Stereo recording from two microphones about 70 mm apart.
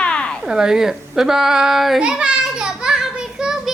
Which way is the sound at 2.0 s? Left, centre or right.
Centre.